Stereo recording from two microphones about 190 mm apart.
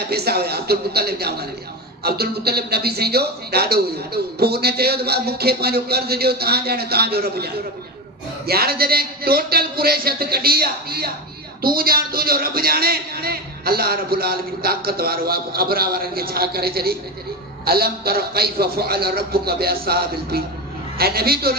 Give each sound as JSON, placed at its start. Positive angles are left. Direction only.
{"t": 0.1, "sound": "a man's voice", "side_deg": -55}